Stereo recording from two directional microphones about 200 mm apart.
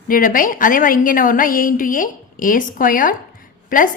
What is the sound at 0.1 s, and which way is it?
A woman's voice, 45° left (ahead or behind).